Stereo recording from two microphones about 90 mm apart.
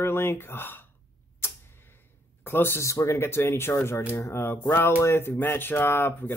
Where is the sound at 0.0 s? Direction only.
25° left (ahead or behind).